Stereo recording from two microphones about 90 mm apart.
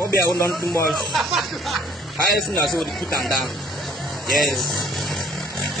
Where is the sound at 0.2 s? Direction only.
30° left (ahead or behind).